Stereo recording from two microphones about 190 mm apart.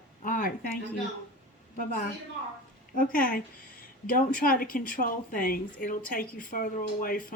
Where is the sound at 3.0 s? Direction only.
45° left (ahead or behind).